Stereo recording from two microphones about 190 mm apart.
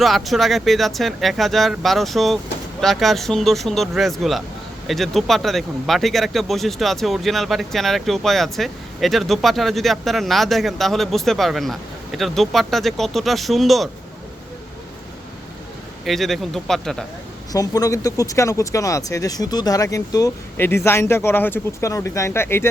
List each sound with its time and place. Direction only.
0.0 s speech: centre (ahead or behind)
16.0 s speech: centre (ahead or behind)
17.5 s speech: 20° left (ahead or behind)